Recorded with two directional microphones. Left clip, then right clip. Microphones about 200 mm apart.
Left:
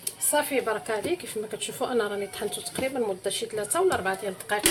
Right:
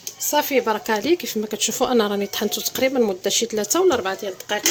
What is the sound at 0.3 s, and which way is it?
Speech, 50° right (ahead or behind).